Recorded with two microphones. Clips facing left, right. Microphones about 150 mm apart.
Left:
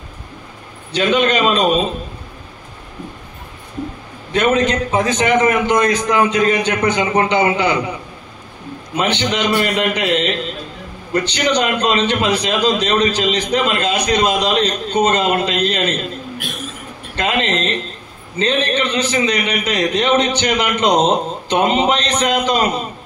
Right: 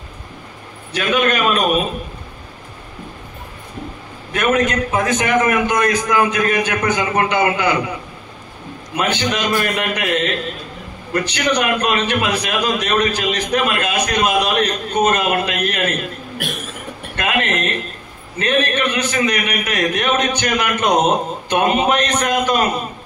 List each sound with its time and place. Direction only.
0.9 s a man's voice: 25° left (ahead or behind)
4.3 s a man's voice: 25° left (ahead or behind)
8.9 s a man's voice: 20° left (ahead or behind)
11.2 s a man's voice: 25° left (ahead or behind)
17.2 s a man's voice: 25° left (ahead or behind)